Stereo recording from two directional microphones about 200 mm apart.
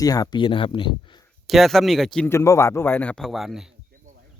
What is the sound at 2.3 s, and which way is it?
A man's voice, 15° left (ahead or behind).